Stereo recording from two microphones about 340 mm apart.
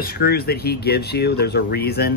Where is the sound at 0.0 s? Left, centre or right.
Left.